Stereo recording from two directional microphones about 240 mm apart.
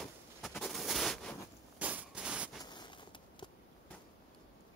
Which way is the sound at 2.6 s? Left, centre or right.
Centre.